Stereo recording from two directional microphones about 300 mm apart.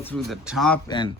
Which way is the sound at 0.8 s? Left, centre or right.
Centre.